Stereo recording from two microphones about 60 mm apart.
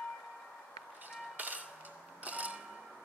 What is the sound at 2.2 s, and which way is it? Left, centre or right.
Tick-tock, right.